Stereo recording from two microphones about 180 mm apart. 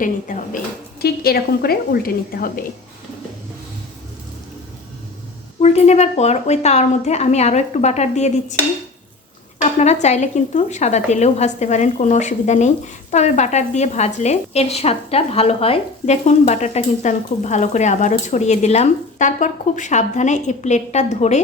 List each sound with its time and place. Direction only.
0.0 s a woman's voice: 50° left (ahead or behind)
5.5 s speech: 35° left (ahead or behind)
9.6 s speech: 40° left (ahead or behind)